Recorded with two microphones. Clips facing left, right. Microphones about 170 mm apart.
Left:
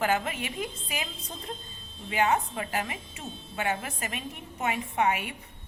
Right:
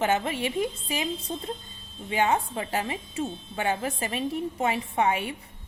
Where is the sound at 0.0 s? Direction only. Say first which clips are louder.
Right 3 dB; 30° right (ahead or behind).